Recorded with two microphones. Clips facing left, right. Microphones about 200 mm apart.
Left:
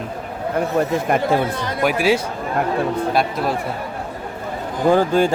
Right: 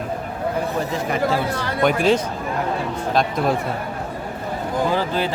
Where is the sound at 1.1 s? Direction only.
50° left (ahead or behind).